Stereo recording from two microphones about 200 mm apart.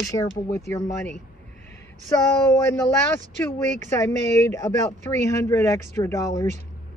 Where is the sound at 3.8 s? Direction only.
15° left (ahead or behind).